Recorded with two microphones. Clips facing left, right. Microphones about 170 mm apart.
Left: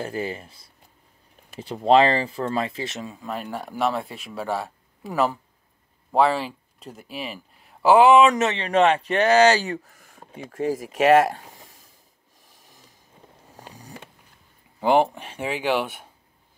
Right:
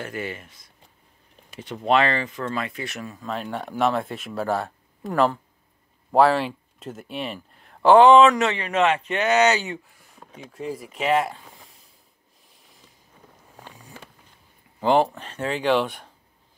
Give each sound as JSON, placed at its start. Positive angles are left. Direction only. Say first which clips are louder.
{"t": 0.0, "sound": "speech", "louder": "left 3 dB", "side_deg": 30}
{"t": 3.2, "sound": "speech", "louder": "right 2 dB", "side_deg": 5}
{"t": 8.6, "sound": "speech", "louder": "left 6 dB", "side_deg": 35}
{"t": 11.0, "sound": "speech", "louder": "left 6 dB", "side_deg": 75}
{"t": 13.6, "sound": "a sound", "louder": "left 2 dB", "side_deg": 40}
{"t": 14.8, "sound": "speech", "louder": "even", "side_deg": 15}